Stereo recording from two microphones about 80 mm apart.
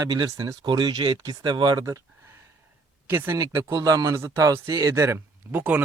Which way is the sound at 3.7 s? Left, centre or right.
Right.